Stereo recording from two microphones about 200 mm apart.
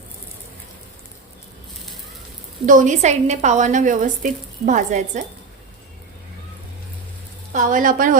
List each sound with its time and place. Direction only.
2.6 s a woman's voice: 40° right (ahead or behind)
7.5 s a woman's voice: 40° right (ahead or behind)